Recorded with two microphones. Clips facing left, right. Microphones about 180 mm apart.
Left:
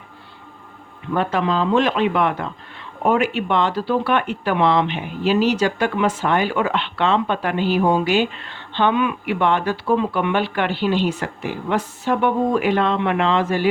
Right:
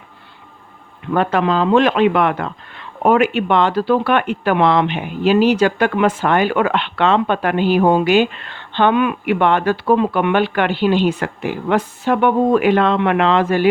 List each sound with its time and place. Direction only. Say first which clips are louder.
1.1 s speech: right 4 dB; 60° right (ahead or behind)